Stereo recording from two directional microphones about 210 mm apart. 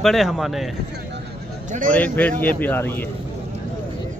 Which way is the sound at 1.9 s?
5° left (ahead or behind).